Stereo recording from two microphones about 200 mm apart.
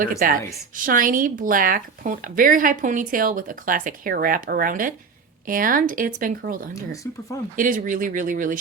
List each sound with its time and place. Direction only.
0.2 s speech: 45° right (ahead or behind)
6.9 s speech: 15° left (ahead or behind)
7.5 s speech: 40° right (ahead or behind)